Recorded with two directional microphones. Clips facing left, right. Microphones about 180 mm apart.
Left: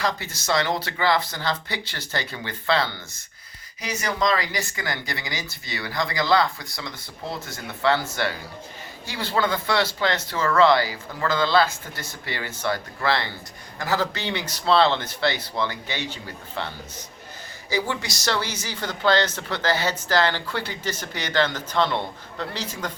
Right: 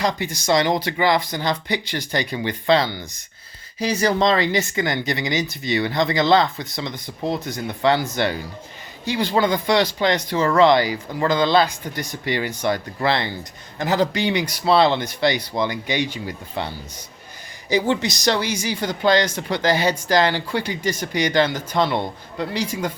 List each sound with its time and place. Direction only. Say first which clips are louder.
0.0 s speech: right 4 dB; 15° right (ahead or behind)
3.8 s speech: right 7 dB; 30° right (ahead or behind); by 22.9 s 10° right (ahead or behind)